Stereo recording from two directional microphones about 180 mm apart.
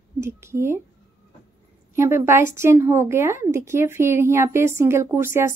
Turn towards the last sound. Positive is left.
turn(degrees=-15)  # may be behind; listen again after turning